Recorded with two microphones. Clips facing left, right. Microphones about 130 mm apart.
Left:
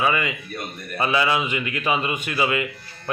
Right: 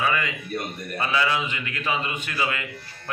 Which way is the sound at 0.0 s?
20° left (ahead or behind).